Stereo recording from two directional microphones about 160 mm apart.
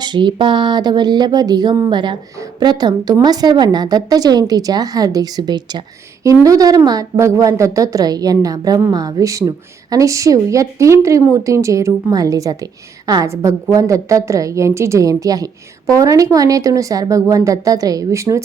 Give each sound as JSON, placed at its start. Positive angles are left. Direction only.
{"t": 0.0, "sound": "a woman's voice", "side_deg": -30}